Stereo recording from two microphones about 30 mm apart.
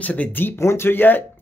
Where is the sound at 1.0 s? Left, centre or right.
Left.